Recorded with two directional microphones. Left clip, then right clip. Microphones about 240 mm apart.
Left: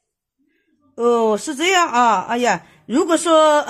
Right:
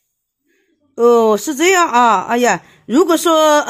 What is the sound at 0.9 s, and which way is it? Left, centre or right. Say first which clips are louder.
Speech: right 6 dB; right.